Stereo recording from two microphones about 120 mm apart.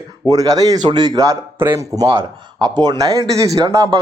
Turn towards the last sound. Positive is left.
turn(degrees=-30)  # may be behind; listen again after turning